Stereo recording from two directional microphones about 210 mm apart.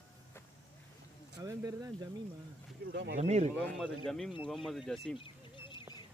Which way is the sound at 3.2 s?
30° right (ahead or behind).